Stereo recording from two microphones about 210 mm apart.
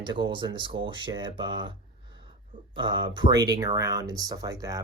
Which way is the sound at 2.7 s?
20° right (ahead or behind).